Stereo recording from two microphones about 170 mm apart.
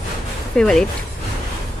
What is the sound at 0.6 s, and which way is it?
Speech, 5° left (ahead or behind).